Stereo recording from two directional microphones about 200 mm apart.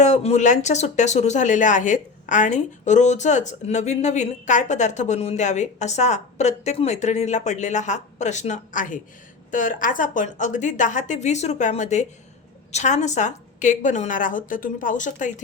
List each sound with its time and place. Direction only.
0.0 s speech: 35° left (ahead or behind)